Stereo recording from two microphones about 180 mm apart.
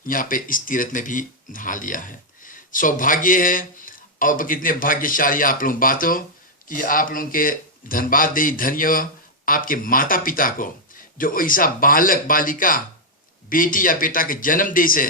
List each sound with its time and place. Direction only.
0.1 s speech: 50° left (ahead or behind)